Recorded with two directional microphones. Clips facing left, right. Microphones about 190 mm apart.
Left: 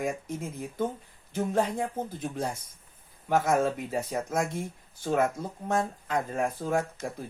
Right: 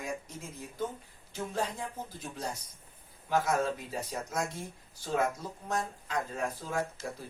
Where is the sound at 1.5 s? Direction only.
55° left (ahead or behind).